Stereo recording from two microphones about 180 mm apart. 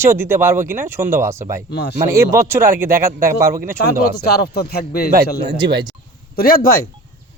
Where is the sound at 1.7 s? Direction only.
65° left (ahead or behind).